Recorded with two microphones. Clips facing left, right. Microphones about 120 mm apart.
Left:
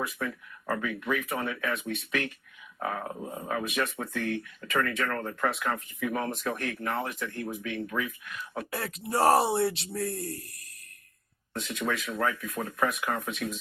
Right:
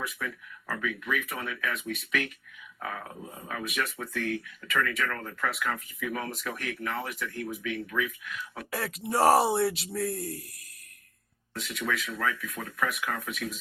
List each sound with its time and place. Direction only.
0.0 s speech: 30° left (ahead or behind)
8.7 s speech: centre (ahead or behind)
11.5 s speech: 30° left (ahead or behind)